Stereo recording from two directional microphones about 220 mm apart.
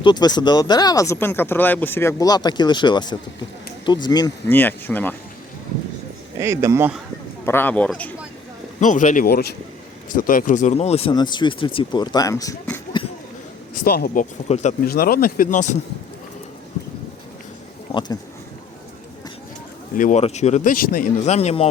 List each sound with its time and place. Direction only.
0.0 s speech: 20° left (ahead or behind)
6.4 s speech: 10° right (ahead or behind)
7.4 s speech: 10° left (ahead or behind)
8.8 s speech: 35° left (ahead or behind); by 12.8 s 10° left (ahead or behind)
13.7 s speech: 45° left (ahead or behind)
20.0 s speech: 35° left (ahead or behind)